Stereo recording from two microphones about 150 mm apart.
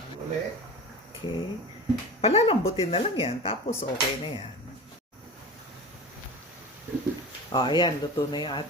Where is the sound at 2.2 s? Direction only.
40° left (ahead or behind).